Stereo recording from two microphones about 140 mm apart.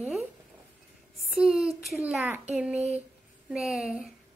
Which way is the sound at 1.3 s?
Centre (ahead or behind).